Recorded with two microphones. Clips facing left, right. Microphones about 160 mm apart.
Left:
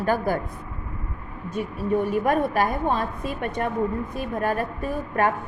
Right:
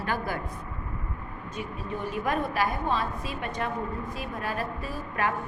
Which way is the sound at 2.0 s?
50° left (ahead or behind).